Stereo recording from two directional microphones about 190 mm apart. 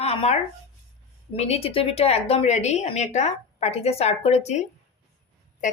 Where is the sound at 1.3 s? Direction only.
35° left (ahead or behind).